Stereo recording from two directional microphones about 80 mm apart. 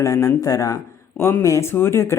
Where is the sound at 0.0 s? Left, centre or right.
Left.